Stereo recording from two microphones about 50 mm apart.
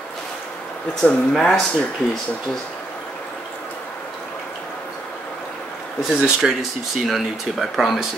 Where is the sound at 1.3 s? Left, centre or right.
Centre.